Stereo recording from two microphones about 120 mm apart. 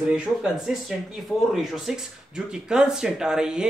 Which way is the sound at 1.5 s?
5° right (ahead or behind).